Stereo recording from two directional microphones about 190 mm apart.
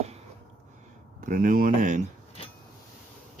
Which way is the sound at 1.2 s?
45° right (ahead or behind).